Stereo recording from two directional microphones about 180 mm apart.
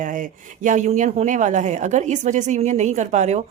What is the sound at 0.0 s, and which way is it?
Speech, 45° right (ahead or behind).